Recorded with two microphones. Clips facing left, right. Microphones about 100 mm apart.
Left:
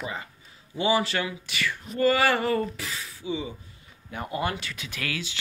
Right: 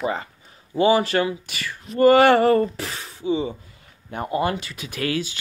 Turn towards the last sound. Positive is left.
turn(degrees=-35)  # may be behind; listen again after turning